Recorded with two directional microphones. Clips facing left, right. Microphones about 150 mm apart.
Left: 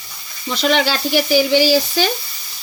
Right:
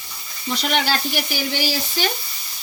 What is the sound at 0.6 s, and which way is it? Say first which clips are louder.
Speech: left 6 dB; 90° left.